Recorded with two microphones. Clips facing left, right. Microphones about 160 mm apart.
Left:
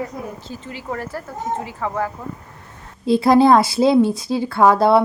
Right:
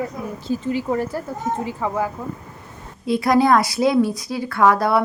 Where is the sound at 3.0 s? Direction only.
30° left (ahead or behind).